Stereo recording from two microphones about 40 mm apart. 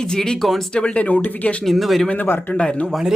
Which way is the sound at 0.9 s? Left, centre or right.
Left.